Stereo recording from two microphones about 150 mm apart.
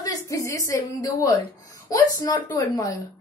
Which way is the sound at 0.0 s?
20° left (ahead or behind).